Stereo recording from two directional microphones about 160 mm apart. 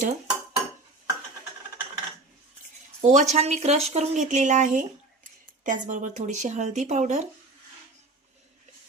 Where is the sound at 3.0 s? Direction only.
45° right (ahead or behind).